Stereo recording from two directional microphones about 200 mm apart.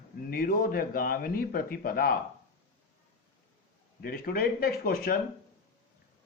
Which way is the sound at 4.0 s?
50° left (ahead or behind).